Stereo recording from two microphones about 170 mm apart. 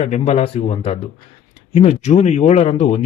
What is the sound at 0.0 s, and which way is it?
Speech, 40° left (ahead or behind).